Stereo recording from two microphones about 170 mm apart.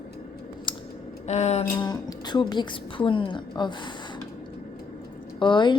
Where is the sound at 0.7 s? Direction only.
30° left (ahead or behind).